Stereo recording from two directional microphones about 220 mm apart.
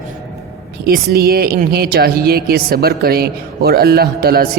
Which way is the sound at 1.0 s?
45° right (ahead or behind).